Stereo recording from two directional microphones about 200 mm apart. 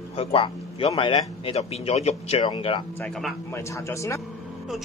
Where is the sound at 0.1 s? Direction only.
30° left (ahead or behind).